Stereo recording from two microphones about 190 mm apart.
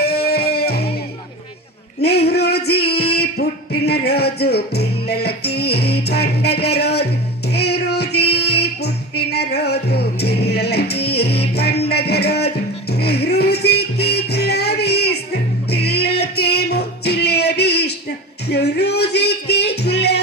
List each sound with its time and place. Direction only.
0.0 s music: 55° left (ahead or behind)
2.0 s music: 60° left (ahead or behind)